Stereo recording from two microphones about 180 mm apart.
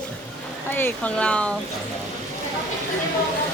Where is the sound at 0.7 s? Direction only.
10° left (ahead or behind).